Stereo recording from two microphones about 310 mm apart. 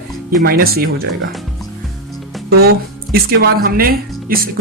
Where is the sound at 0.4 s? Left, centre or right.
Right.